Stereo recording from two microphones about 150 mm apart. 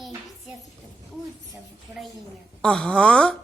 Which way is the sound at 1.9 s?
10° right (ahead or behind).